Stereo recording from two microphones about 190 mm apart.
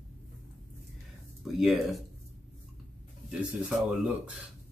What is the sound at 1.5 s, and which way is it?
Speech, centre (ahead or behind).